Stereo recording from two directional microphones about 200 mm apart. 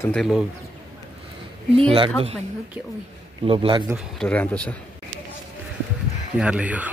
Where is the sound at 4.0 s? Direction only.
5° left (ahead or behind).